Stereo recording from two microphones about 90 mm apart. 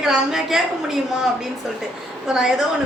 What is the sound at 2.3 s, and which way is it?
Speech, 5° right (ahead or behind).